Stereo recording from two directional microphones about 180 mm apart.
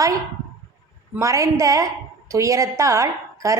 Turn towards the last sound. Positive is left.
turn(degrees=-15)  # may be behind; listen again after turning